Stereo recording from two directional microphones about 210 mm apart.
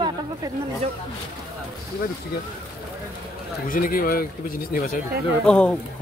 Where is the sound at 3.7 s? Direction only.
40° left (ahead or behind).